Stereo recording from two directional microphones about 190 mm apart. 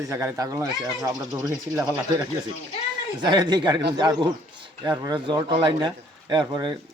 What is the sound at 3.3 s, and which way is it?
A man's voice, 20° right (ahead or behind).